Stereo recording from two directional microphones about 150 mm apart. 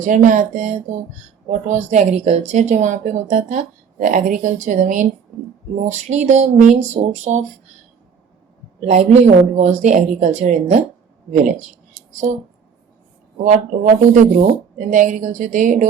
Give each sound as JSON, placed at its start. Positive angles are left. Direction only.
{"t": 0.0, "sound": "speech", "side_deg": -60}
{"t": 8.8, "sound": "speech", "side_deg": -50}
{"t": 13.4, "sound": "speech", "side_deg": -55}